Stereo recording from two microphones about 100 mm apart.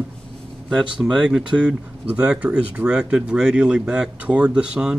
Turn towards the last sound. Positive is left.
turn(degrees=-5)  # may be behind; listen again after turning